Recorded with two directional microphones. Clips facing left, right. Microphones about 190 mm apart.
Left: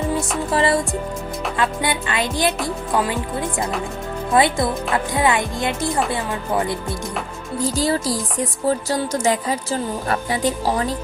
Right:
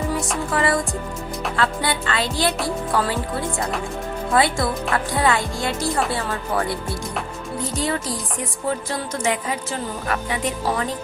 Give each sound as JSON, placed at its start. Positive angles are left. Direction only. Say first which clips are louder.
{"t": 0.5, "sound": "speech", "louder": "left 3 dB", "side_deg": 25}
{"t": 1.5, "sound": "music", "louder": "left 1 dB", "side_deg": 15}
{"t": 4.4, "sound": "speech", "louder": "left 2 dB", "side_deg": 20}
{"t": 7.6, "sound": "a woman's voice", "louder": "left 5 dB", "side_deg": 35}